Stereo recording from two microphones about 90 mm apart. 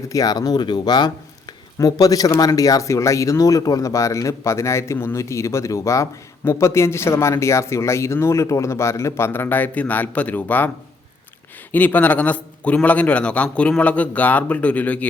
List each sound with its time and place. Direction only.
0.1 s speech: 45° left (ahead or behind); by 10.7 s 20° left (ahead or behind)
11.7 s a man's voice: 20° left (ahead or behind)